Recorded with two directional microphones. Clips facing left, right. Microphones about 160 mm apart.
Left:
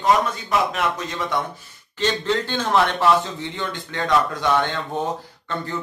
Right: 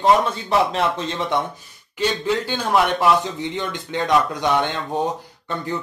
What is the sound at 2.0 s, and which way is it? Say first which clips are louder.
A man's voice: right 1 dB; 10° right (ahead or behind).